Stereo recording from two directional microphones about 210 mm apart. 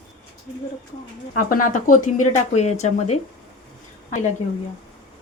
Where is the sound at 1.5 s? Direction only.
40° left (ahead or behind).